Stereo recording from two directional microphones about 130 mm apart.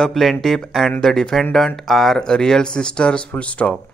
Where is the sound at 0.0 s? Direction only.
Centre (ahead or behind).